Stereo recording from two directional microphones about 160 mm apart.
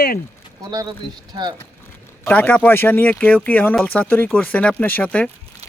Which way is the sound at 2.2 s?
10° left (ahead or behind).